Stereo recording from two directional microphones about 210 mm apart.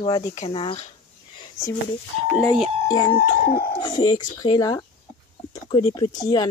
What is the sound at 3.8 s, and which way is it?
Speech, 20° left (ahead or behind).